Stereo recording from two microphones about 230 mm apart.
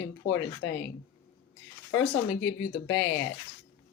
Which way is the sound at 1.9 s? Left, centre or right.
Left.